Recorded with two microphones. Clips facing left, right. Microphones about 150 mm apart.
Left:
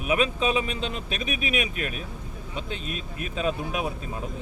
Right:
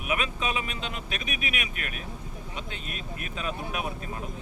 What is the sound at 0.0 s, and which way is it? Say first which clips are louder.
Speech: left 6 dB; 30° left (ahead or behind).